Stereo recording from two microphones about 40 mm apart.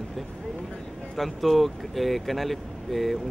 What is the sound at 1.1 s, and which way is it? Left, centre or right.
Speech, centre.